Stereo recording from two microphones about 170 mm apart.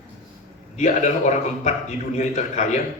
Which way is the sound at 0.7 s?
45° left (ahead or behind).